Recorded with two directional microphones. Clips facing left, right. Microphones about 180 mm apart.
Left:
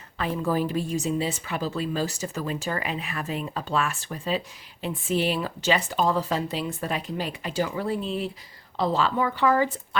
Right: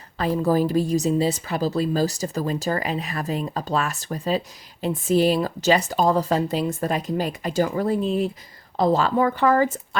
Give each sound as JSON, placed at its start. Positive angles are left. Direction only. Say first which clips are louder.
{"t": 0.2, "sound": "a woman's voice", "louder": "right 5 dB", "side_deg": -40}